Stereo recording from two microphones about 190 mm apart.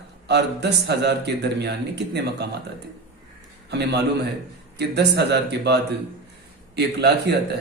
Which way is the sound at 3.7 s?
60° right (ahead or behind).